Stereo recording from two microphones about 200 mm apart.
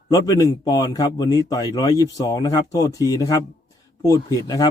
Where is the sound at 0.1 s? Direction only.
15° left (ahead or behind).